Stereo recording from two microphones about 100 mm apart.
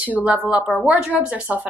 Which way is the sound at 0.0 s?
15° right (ahead or behind).